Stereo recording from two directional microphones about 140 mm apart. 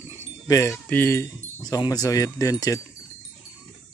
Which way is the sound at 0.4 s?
25° left (ahead or behind).